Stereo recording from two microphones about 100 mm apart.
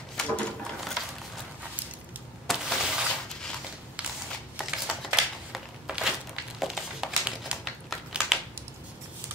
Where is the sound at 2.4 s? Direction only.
Centre (ahead or behind).